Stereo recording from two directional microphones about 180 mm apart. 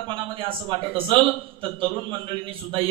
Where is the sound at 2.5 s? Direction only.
30° right (ahead or behind).